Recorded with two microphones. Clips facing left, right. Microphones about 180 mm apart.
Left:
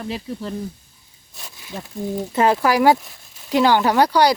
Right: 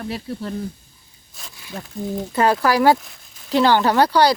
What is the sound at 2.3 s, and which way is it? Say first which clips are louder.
Speech: even; 20° left (ahead or behind).